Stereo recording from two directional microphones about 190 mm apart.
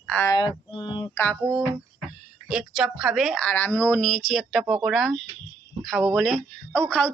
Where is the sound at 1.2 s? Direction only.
5° left (ahead or behind).